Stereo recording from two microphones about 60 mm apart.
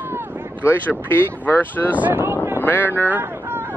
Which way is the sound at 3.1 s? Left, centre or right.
Right.